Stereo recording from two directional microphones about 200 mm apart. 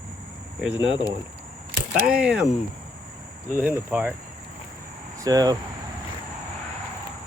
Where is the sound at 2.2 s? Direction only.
5° right (ahead or behind).